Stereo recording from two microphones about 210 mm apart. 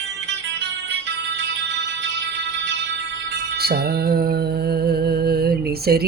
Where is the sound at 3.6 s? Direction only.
50° right (ahead or behind).